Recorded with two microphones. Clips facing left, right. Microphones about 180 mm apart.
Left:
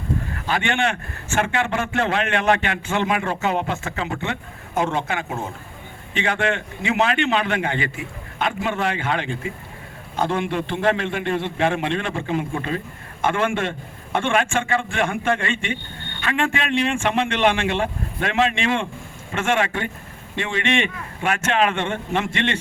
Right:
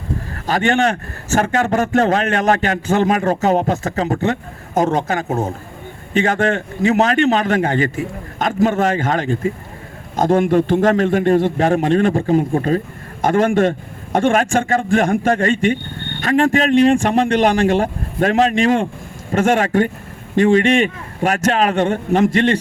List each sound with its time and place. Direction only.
0.4 s a man's voice: 40° right (ahead or behind)